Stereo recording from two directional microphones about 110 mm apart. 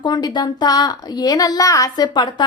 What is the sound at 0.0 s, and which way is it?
A woman's voice, 40° left (ahead or behind).